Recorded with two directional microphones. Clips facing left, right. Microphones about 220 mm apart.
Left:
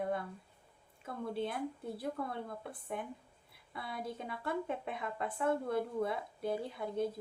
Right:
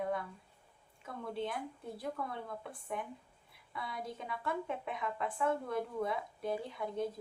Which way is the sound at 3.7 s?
30° left (ahead or behind).